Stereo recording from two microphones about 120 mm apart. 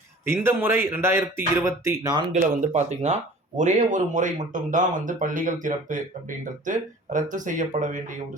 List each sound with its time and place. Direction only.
0.3 s speech: 20° right (ahead or behind)
2.3 s speech: 75° right (ahead or behind)
3.6 s speech: 90° right